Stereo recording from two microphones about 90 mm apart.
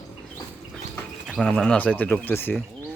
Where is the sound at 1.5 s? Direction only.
10° left (ahead or behind).